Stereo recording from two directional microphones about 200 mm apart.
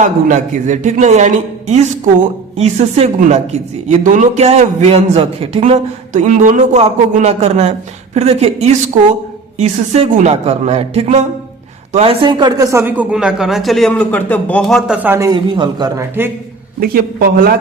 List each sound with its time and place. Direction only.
0.0 s a man's voice: 40° right (ahead or behind); by 16.3 s 15° right (ahead or behind)
16.8 s speech: 50° right (ahead or behind)